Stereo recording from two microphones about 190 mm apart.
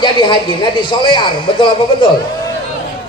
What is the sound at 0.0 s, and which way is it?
A man's voice, 25° left (ahead or behind).